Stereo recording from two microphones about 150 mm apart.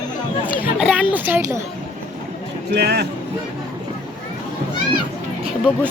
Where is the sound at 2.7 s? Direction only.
90° right.